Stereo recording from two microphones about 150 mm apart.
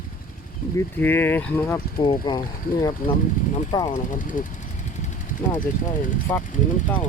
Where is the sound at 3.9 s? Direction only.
60° left (ahead or behind).